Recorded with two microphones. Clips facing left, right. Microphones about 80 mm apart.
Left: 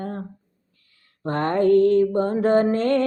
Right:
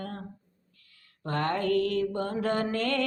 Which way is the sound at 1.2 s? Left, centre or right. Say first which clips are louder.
Left 8 dB; left.